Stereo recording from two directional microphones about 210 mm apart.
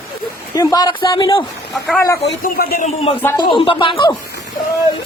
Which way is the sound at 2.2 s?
50° left (ahead or behind).